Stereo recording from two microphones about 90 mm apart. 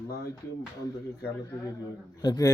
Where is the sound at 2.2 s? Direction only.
45° left (ahead or behind).